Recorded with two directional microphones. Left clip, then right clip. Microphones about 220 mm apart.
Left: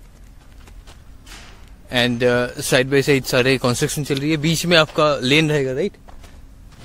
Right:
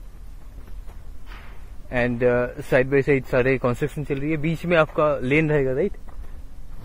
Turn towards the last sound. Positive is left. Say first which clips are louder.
# left 1 dB
turn(degrees=5)  # may be behind; listen again after turning